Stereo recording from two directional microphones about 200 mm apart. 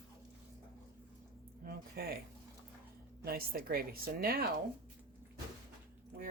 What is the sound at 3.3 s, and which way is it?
Speech, 50° right (ahead or behind).